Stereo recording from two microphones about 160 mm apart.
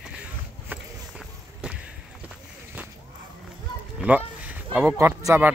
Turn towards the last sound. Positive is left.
turn(degrees=-15)  # may be behind; listen again after turning